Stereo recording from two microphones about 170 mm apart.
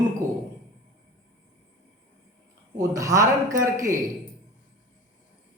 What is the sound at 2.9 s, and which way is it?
Speech, 20° right (ahead or behind).